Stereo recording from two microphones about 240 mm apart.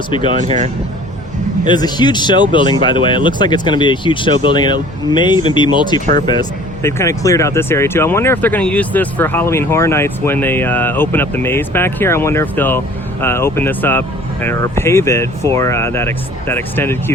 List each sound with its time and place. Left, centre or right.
0.1 s speech: left
0.3 s speech: right
1.6 s speech: centre